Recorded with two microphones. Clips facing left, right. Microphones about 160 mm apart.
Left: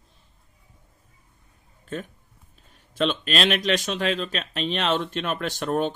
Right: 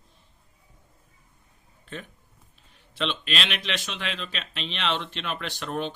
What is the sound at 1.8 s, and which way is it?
Speech, 45° left (ahead or behind).